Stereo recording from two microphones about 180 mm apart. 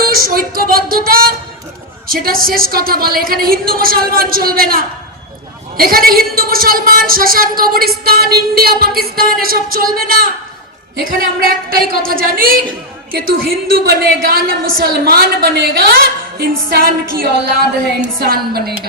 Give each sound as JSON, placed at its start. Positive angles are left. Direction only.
{"t": 0.1, "sound": "a woman's voice", "side_deg": -55}
{"t": 18.5, "sound": "a woman's voice", "side_deg": -60}